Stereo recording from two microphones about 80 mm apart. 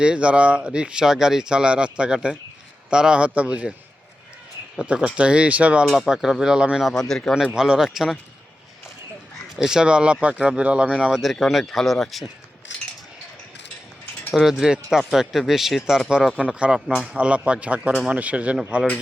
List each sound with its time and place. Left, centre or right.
0.0 s speech: centre
4.8 s speech: centre
5.8 s speech: centre
6.9 s speech: centre
7.5 s speech: centre
9.6 s speech: centre
14.3 s speech: centre